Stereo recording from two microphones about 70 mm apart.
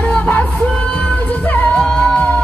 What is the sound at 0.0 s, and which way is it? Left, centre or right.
Music, centre.